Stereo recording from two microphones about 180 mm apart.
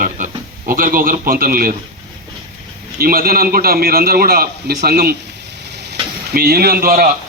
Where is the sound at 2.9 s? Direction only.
55° right (ahead or behind).